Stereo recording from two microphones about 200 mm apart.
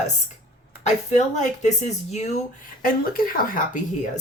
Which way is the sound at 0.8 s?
35° left (ahead or behind).